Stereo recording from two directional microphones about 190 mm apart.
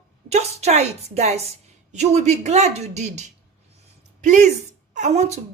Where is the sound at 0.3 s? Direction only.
35° right (ahead or behind).